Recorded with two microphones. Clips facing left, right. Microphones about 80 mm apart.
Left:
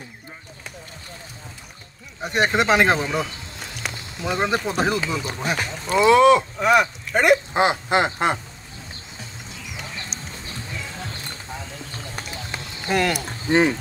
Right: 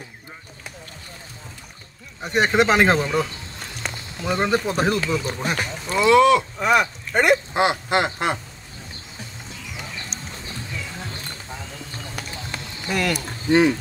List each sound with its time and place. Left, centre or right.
2.2 s speech: centre
5.9 s speech: left
6.6 s speech: centre
7.5 s speech: left
12.8 s speech: left